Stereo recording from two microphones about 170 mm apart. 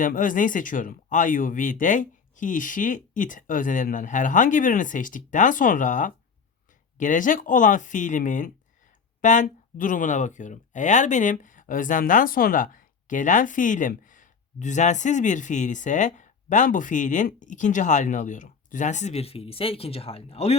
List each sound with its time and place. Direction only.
0.0 s speech: 50° left (ahead or behind)